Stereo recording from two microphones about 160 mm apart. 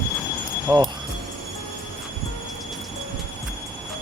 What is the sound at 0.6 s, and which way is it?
Speech, 15° right (ahead or behind).